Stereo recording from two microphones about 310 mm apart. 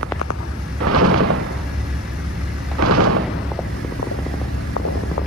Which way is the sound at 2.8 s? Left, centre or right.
Right.